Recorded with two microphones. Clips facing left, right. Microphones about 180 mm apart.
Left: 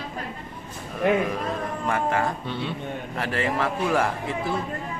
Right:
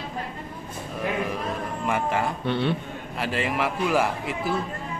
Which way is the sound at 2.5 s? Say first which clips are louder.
Right 6 dB; 65° right (ahead or behind).